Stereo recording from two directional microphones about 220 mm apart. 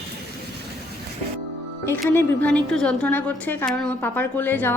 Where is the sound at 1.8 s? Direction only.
10° left (ahead or behind).